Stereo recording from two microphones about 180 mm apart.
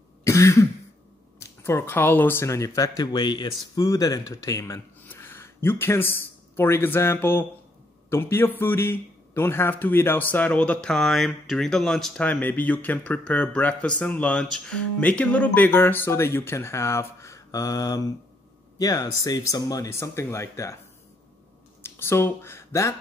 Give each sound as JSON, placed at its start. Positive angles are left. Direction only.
{"t": 0.2, "sound": "cough", "side_deg": 15}
{"t": 1.6, "sound": "a man's voice", "side_deg": 15}
{"t": 21.8, "sound": "speech", "side_deg": 15}